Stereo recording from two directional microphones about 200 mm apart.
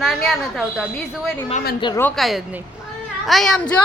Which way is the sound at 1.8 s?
20° left (ahead or behind).